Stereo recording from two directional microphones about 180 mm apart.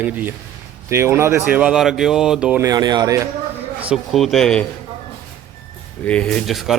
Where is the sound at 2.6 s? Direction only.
20° right (ahead or behind).